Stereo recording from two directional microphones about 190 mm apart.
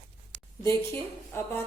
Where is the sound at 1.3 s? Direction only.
10° left (ahead or behind).